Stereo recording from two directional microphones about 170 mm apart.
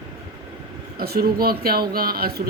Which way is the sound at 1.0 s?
65° right (ahead or behind).